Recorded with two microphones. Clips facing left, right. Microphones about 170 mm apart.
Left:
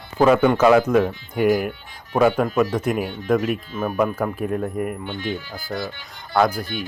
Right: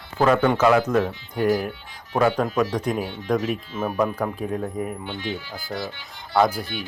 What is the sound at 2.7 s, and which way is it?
Speech, 5° left (ahead or behind).